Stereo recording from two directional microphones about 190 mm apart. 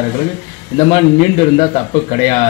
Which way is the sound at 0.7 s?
30° left (ahead or behind).